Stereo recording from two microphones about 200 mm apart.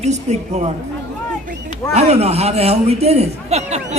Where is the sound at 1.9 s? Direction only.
30° right (ahead or behind).